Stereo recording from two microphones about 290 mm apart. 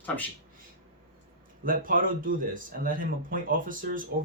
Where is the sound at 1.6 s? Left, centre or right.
Right.